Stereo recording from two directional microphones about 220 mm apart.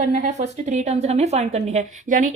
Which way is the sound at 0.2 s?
35° right (ahead or behind).